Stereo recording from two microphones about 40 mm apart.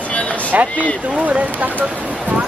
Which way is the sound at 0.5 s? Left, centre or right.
Right.